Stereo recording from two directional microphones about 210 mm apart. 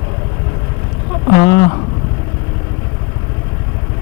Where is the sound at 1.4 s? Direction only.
20° left (ahead or behind).